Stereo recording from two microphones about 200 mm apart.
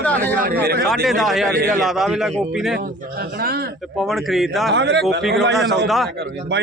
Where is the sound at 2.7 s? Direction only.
50° right (ahead or behind).